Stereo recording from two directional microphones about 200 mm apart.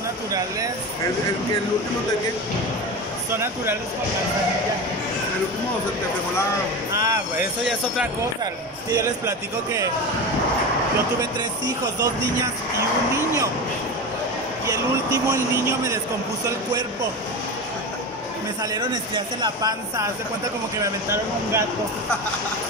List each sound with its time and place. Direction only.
7.0 s speech: 15° right (ahead or behind)
8.9 s speech: 15° right (ahead or behind)
11.1 s speech: 15° right (ahead or behind)
14.7 s speech: 15° right (ahead or behind)
18.8 s speech: 20° right (ahead or behind)